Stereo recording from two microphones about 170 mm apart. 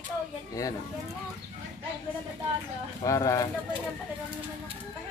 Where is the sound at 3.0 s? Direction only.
20° left (ahead or behind).